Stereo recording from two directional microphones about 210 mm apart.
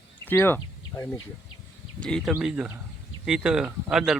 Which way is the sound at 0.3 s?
10° left (ahead or behind).